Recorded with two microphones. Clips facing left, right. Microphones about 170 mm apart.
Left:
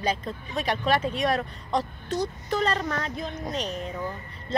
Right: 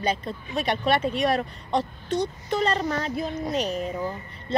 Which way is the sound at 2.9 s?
5° right (ahead or behind).